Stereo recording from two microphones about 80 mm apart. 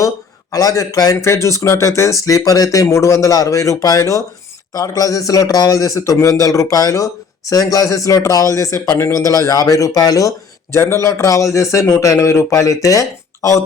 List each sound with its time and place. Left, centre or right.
0.5 s speech: left
2.8 s a man's voice: left
10.8 s a man's voice: left